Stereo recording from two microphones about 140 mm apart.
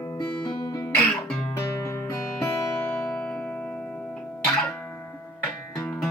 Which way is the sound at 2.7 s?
10° left (ahead or behind).